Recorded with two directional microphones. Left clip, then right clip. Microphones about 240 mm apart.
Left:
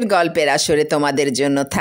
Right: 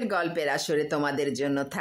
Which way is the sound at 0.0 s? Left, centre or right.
Left.